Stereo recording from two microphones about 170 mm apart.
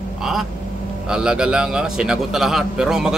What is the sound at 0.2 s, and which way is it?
A man's voice, centre (ahead or behind).